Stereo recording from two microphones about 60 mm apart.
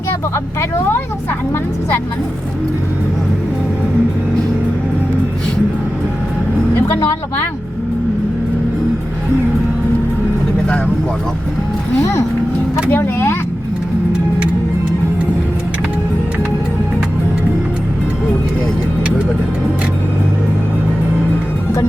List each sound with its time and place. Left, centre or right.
6.7 s speech: left
12.9 s speech: left